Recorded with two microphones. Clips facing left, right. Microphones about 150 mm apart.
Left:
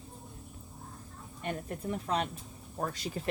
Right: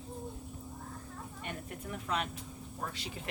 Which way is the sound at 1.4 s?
40° left (ahead or behind).